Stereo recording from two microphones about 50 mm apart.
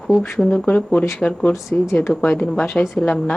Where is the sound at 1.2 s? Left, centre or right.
Left.